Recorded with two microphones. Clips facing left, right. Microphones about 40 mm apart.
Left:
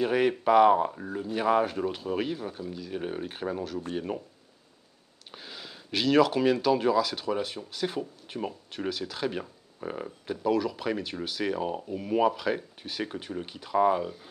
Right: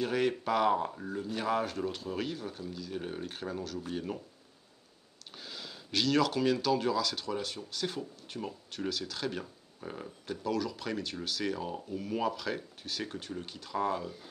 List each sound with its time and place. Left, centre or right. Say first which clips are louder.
0.0 s speech: left 6 dB; centre
5.3 s speech: left 2 dB; centre